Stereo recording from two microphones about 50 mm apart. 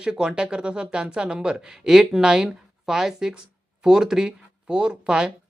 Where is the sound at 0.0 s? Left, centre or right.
Centre.